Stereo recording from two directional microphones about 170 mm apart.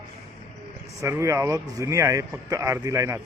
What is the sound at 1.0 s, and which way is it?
Speech, 15° right (ahead or behind).